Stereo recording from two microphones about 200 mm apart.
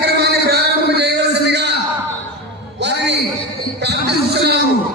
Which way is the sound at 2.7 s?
60° right (ahead or behind).